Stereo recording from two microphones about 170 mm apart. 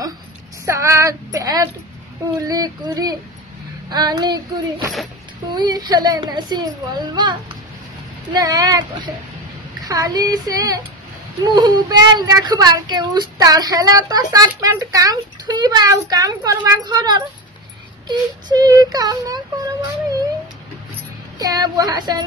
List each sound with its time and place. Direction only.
0.7 s female singing: 15° right (ahead or behind)
2.4 s speech: 20° right (ahead or behind)
21.4 s speech: 20° right (ahead or behind)